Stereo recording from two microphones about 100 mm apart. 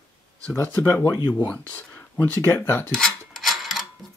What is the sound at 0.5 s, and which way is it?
Speech, 25° left (ahead or behind).